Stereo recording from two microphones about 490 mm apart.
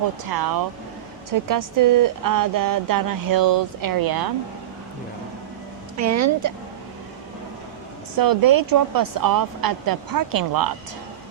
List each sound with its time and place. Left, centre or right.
0.3 s speech: right
6.0 s speech: right
8.2 s speech: right